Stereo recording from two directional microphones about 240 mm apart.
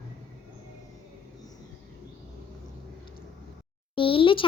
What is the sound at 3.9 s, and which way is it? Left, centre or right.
Speech, left.